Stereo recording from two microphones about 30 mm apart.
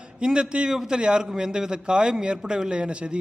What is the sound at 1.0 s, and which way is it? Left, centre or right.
A man's voice, right.